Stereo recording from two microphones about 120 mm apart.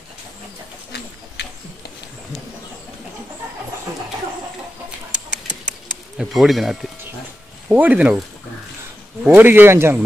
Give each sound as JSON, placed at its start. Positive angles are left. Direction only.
{"t": 5.3, "sound": "bird", "side_deg": -5}
{"t": 7.7, "sound": "speech", "side_deg": -15}
{"t": 9.2, "sound": "speech", "side_deg": -15}